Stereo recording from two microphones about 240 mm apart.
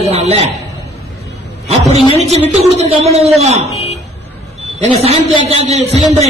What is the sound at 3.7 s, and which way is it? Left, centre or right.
Vehicle, left.